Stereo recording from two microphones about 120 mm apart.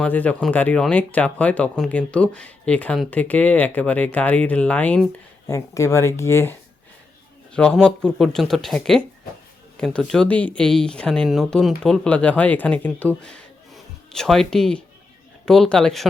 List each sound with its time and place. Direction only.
0.0 s speech: 10° left (ahead or behind)
5.5 s speech: 25° left (ahead or behind)
7.5 s speech: 5° left (ahead or behind)